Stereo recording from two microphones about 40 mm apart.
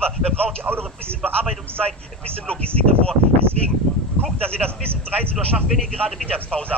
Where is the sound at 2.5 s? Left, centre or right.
Left.